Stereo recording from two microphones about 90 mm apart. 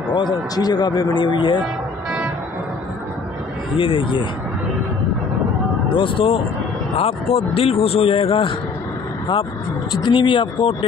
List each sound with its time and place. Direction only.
0.1 s a man's voice: 55° left (ahead or behind)
3.7 s speech: 75° left (ahead or behind)
5.9 s speech: 75° left (ahead or behind)
10.0 s a man's voice: 60° left (ahead or behind)